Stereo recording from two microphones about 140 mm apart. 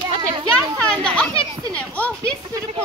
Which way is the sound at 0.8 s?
5° left (ahead or behind).